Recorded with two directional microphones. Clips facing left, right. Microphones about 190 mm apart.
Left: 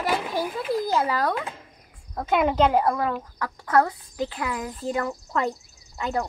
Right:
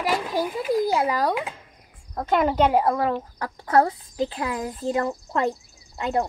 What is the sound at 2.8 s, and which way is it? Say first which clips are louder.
Speech: right 2 dB; 30° right (ahead or behind).